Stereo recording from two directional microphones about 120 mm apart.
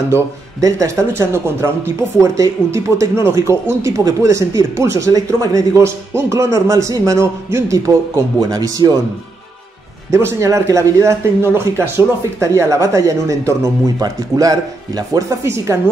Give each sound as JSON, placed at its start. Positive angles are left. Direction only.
{"t": 0.1, "sound": "speech", "side_deg": -25}
{"t": 10.1, "sound": "speech", "side_deg": -25}